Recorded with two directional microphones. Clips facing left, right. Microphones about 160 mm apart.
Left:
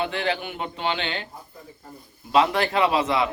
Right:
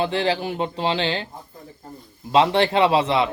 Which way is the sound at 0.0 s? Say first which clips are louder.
Right 4 dB; 30° right (ahead or behind).